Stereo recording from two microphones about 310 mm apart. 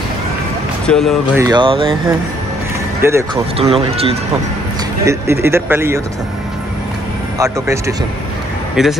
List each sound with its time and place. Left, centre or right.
0.8 s speech: centre
1.4 s speech: centre
5.0 s speech: centre
7.3 s speech: centre